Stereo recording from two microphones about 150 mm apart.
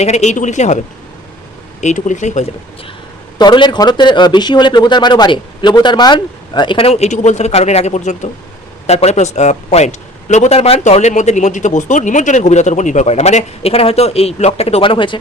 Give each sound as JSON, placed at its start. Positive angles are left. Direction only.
{"t": 0.0, "sound": "speech", "side_deg": 50}
{"t": 1.8, "sound": "speech", "side_deg": 55}
{"t": 3.3, "sound": "a man's voice", "side_deg": 30}